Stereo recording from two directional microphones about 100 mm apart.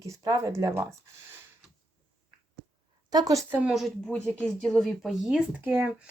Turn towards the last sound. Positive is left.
turn(degrees=-15)  # may be behind; listen again after turning